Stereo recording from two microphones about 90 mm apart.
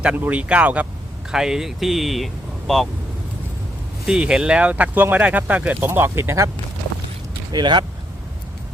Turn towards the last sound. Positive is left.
turn(degrees=-55)  # may be behind; listen again after turning